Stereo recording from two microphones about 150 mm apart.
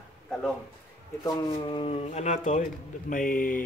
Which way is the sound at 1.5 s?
35° left (ahead or behind).